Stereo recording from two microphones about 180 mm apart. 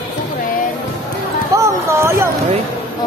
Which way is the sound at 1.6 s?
15° right (ahead or behind).